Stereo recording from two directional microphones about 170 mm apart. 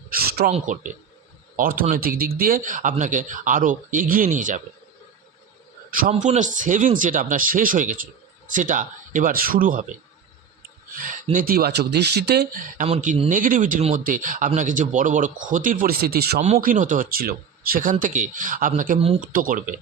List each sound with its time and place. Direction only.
0.1 s a sound: 65° right (ahead or behind)
0.5 s speech: 45° right (ahead or behind)
6.1 s speech: 45° right (ahead or behind)
10.9 s speech: 50° right (ahead or behind)
12.8 s speech: 45° right (ahead or behind); by 16.4 s 65° right (ahead or behind)
16.6 s speech: 50° right (ahead or behind)
18.9 s speech: 35° right (ahead or behind)
19.2 s speech: 55° right (ahead or behind)